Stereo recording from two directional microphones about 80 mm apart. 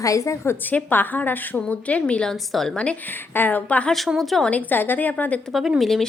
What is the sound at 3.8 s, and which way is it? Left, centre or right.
Speech, centre.